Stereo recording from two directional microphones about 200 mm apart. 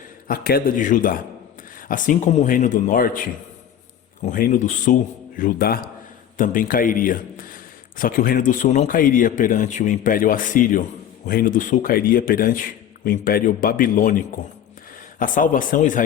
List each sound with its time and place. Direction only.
0.3 s a man's voice: 50° left (ahead or behind)
4.3 s a man's voice: 40° left (ahead or behind)